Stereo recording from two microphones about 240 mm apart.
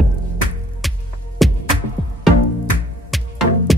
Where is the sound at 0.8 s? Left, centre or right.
Centre.